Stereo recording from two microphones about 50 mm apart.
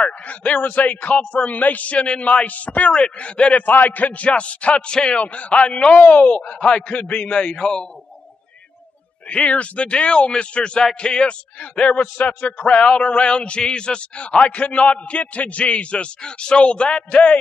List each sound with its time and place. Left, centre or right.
0.3 s speech: left
3.6 s speech: left
5.9 s speech: left; by 7.9 s centre
9.3 s speech: left